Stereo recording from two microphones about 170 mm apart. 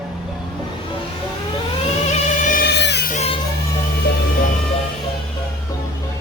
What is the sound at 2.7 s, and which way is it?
Music, 85° left.